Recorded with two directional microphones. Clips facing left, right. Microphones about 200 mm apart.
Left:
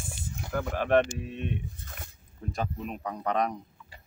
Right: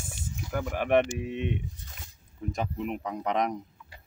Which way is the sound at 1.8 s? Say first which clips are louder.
Left 4 dB; 55° left (ahead or behind).